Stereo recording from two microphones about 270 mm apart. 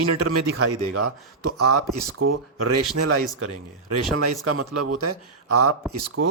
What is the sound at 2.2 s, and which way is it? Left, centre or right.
A man's voice, right.